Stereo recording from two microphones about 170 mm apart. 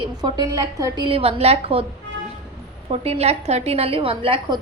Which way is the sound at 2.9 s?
35° right (ahead or behind).